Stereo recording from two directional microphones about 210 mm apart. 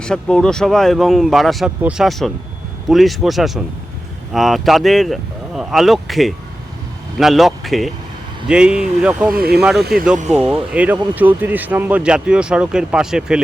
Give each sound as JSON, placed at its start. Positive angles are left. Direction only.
{"t": 0.0, "sound": "speech", "side_deg": 5}
{"t": 9.3, "sound": "speech", "side_deg": -45}
{"t": 9.6, "sound": "speech", "side_deg": 0}